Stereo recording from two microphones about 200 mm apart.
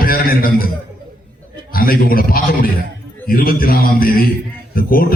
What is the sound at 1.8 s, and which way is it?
A man's voice, 45° left (ahead or behind).